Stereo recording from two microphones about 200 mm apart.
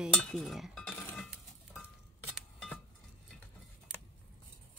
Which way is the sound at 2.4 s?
5° left (ahead or behind).